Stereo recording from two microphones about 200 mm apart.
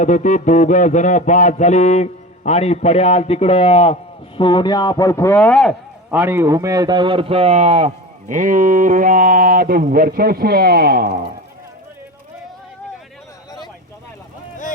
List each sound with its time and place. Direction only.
0.0 s music: 40° left (ahead or behind)
4.4 s a man's voice: 25° left (ahead or behind); by 5.7 s 5° left (ahead or behind)
6.1 s a man's voice: 10° right (ahead or behind); by 11.1 s 50° right (ahead or behind)